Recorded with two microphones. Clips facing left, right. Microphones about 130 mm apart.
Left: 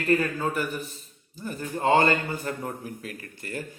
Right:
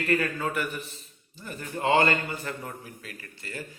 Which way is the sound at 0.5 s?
40° left (ahead or behind).